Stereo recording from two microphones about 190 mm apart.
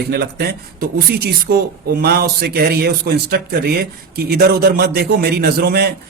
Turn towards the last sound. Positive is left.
turn(degrees=-55)  # may be behind; listen again after turning